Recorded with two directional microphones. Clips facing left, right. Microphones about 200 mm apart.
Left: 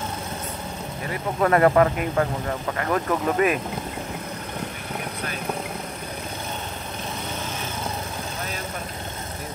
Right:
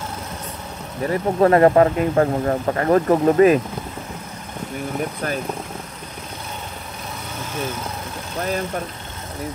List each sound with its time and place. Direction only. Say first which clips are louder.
1.0 s speech: right 7 dB; 35° right (ahead or behind)